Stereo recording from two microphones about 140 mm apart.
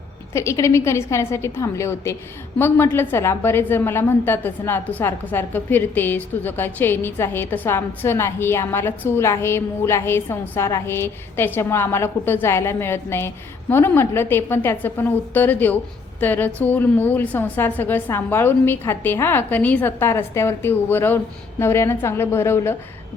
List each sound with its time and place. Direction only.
0.3 s a woman's voice: 20° left (ahead or behind)